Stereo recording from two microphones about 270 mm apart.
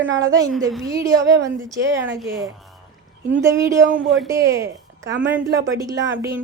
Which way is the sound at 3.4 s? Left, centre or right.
Centre.